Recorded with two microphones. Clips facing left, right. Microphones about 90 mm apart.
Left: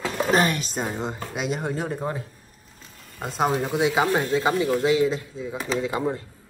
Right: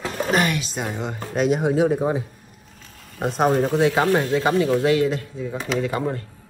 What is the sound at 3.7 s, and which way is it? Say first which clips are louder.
A man's voice: right 3 dB; 15° left (ahead or behind).